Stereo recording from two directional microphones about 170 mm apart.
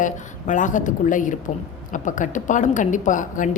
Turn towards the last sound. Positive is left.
turn(degrees=50)  # may be behind; listen again after turning